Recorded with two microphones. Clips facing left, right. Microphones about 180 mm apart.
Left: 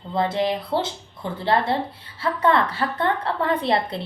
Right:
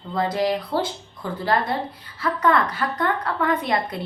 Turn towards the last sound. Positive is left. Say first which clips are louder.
# left 1 dB
turn(degrees=30)  # may be behind; listen again after turning